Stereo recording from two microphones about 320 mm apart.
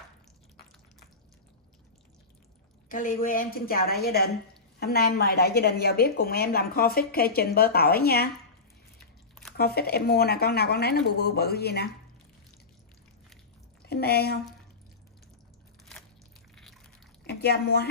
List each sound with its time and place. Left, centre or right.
2.9 s a woman's voice: left
9.6 s a woman's voice: left
13.8 s speech: left
17.3 s a woman's voice: left